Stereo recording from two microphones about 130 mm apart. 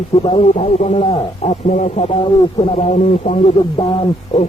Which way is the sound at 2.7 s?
55° left (ahead or behind).